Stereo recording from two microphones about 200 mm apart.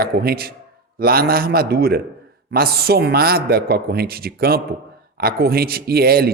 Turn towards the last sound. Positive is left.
turn(degrees=-50)  # may be behind; listen again after turning